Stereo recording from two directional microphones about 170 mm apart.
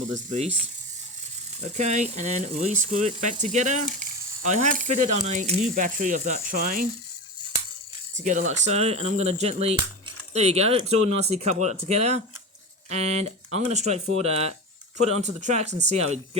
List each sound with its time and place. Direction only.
0.1 s speech: 45° right (ahead or behind)
1.6 s speech: 45° right (ahead or behind)
8.1 s speech: 45° right (ahead or behind)